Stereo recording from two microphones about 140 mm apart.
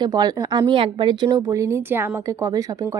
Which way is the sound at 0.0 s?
30° right (ahead or behind).